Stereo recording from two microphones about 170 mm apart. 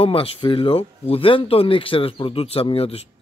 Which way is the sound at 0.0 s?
35° left (ahead or behind).